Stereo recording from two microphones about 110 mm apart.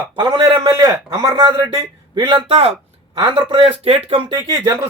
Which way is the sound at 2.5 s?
60° right (ahead or behind).